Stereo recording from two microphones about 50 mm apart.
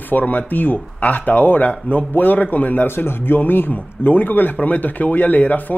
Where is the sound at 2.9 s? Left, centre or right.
Left.